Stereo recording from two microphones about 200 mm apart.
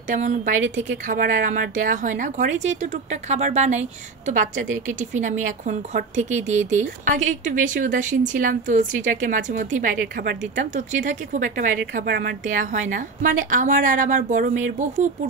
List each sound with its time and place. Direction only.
0.1 s speech: 35° right (ahead or behind)
5.1 s speech: 35° right (ahead or behind)